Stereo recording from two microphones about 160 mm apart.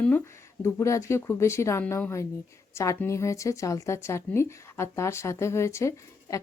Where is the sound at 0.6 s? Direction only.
20° left (ahead or behind).